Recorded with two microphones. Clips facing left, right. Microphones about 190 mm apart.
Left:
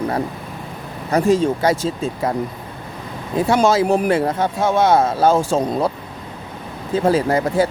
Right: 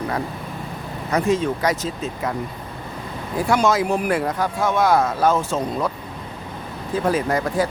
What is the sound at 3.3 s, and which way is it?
Speech, 25° left (ahead or behind).